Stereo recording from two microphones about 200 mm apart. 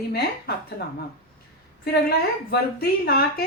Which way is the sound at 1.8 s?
50° left (ahead or behind).